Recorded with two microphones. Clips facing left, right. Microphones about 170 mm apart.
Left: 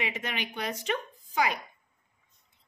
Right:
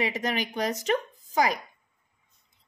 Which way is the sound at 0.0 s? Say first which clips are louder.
Right 6 dB; 40° right (ahead or behind).